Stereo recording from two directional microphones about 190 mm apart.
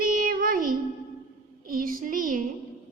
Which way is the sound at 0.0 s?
50° right (ahead or behind).